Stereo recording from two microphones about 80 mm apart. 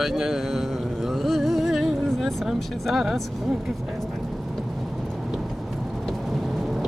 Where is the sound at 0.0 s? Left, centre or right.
Centre.